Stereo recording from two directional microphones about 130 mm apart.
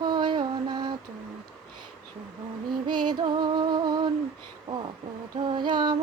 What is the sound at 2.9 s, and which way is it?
Music, 35° right (ahead or behind).